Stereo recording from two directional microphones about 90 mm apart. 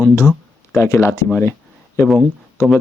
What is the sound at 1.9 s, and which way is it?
Speech, 5° right (ahead or behind).